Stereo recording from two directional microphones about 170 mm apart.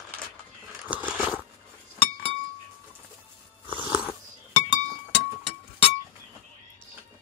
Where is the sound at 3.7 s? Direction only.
10° right (ahead or behind).